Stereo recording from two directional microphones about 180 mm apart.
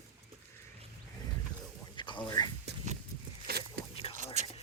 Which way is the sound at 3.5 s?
60° right (ahead or behind).